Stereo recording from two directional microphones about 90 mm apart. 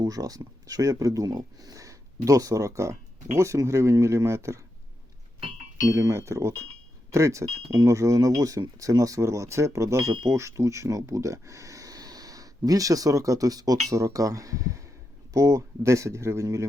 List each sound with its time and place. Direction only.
0.0 s speech: 40° right (ahead or behind)
5.9 s speech: 35° right (ahead or behind)